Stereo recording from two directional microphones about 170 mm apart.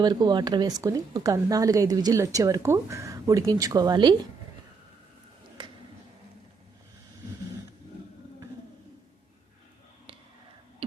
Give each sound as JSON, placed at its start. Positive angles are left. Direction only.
{"t": 0.0, "sound": "a woman's voice", "side_deg": -25}